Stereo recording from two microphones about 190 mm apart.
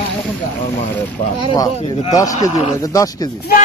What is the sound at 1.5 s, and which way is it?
Speech, 25° left (ahead or behind).